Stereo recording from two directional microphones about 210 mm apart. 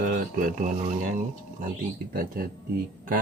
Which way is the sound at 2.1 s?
45° right (ahead or behind).